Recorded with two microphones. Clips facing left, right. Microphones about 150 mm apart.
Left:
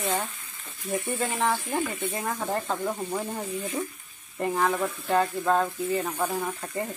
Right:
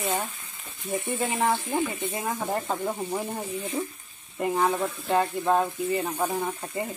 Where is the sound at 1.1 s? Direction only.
5° right (ahead or behind).